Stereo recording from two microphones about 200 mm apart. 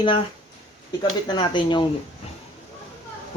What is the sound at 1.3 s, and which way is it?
Speech, 25° left (ahead or behind).